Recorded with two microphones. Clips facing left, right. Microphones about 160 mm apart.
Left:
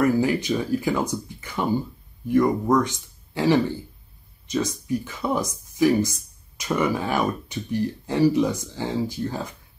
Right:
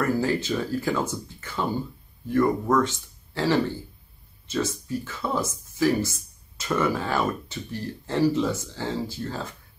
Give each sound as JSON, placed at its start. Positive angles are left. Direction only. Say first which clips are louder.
{"t": 0.0, "sound": "speech", "louder": "left 4 dB", "side_deg": 15}